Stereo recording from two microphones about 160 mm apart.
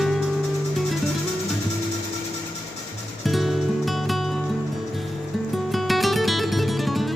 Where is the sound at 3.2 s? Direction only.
Centre (ahead or behind).